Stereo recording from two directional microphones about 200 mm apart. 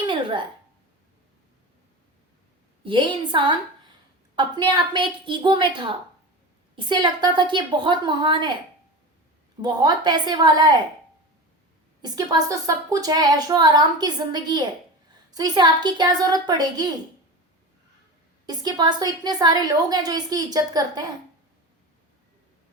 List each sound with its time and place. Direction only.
0.0 s a sound: 25° right (ahead or behind)
2.8 s speech: 25° right (ahead or behind)
9.6 s speech: 20° right (ahead or behind)
12.0 s speech: 20° right (ahead or behind)
18.4 s speech: 20° right (ahead or behind)